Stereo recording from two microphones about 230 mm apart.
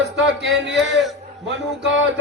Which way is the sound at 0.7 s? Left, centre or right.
Centre.